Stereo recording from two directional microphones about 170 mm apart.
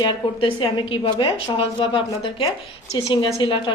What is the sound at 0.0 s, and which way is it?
A woman's voice, 30° left (ahead or behind).